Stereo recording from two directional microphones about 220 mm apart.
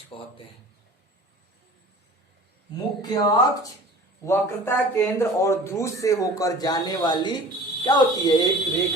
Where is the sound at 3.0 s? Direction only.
20° left (ahead or behind).